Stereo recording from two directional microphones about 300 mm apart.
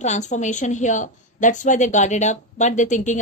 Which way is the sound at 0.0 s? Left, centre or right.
Left.